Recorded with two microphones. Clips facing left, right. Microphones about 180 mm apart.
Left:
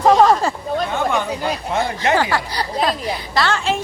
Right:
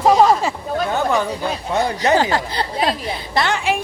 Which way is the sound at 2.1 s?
20° right (ahead or behind).